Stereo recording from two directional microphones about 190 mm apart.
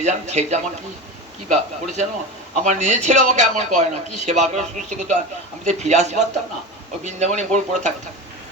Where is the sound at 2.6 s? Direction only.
40° right (ahead or behind).